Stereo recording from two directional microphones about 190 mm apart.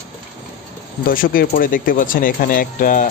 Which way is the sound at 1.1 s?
50° left (ahead or behind).